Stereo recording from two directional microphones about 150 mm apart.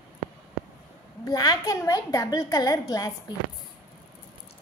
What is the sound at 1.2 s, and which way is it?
A woman's voice, 25° left (ahead or behind).